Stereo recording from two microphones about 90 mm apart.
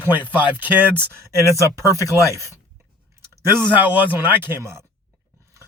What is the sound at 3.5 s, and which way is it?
Speech, 20° right (ahead or behind).